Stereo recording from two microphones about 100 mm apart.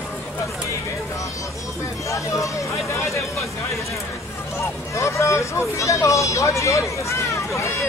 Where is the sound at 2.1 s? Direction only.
30° left (ahead or behind).